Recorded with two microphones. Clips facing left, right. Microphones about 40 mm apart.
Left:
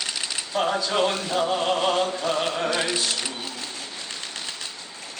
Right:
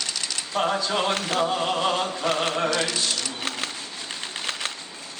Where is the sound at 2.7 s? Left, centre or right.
Centre.